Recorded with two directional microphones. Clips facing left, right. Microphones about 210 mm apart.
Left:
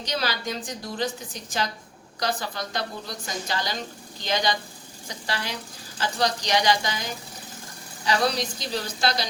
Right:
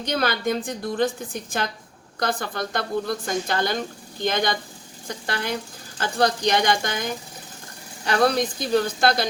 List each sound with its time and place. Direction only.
0.0 s a woman's voice: 55° right (ahead or behind)